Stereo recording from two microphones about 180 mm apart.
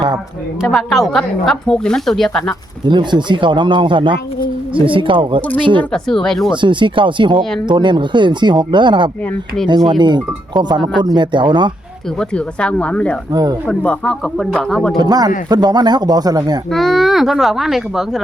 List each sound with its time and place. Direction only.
0.6 s speech: centre (ahead or behind)
2.8 s speech: 25° right (ahead or behind)
5.9 s speech: centre (ahead or behind)
6.6 s speech: 25° right (ahead or behind)
12.3 s speech: 5° left (ahead or behind)
13.3 s speech: 20° right (ahead or behind)
13.7 s speech: 5° left (ahead or behind)
14.9 s speech: 20° right (ahead or behind)
16.7 s speech: centre (ahead or behind)